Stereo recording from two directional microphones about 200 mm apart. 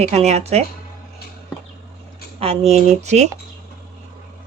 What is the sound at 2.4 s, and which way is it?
Speech, 30° right (ahead or behind).